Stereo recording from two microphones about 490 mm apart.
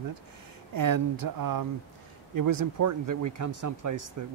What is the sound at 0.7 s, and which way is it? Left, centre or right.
Speech, right.